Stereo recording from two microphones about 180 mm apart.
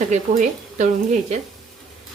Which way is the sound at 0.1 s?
40° right (ahead or behind).